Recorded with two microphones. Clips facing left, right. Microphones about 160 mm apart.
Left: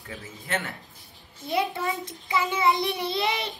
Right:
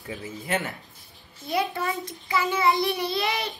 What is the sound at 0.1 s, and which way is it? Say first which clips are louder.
Speech: right 3 dB; 15° right (ahead or behind).